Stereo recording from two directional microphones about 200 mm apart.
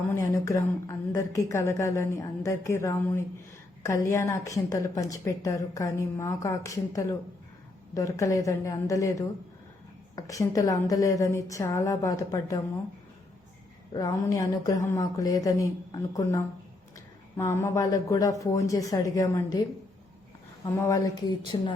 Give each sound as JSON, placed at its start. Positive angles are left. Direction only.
{"t": 0.1, "sound": "a woman's voice", "side_deg": 15}
{"t": 13.9, "sound": "a woman's voice", "side_deg": 15}
{"t": 20.7, "sound": "a woman's voice", "side_deg": 15}